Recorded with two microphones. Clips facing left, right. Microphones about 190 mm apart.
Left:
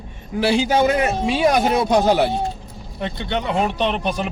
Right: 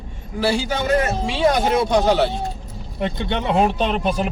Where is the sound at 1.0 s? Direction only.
10° left (ahead or behind).